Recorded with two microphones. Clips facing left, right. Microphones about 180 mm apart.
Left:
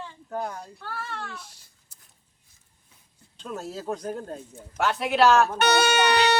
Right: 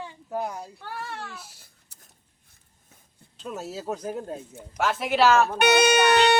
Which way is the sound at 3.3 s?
5° right (ahead or behind).